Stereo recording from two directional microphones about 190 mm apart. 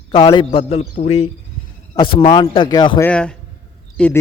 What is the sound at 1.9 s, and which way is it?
Speech, 25° left (ahead or behind).